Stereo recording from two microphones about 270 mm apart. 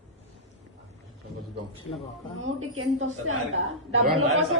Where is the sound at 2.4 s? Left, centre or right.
Right.